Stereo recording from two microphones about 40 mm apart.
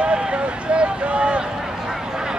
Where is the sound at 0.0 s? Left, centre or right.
Right.